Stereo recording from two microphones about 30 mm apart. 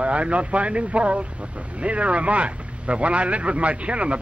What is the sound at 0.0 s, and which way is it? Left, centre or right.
A man's voice, right.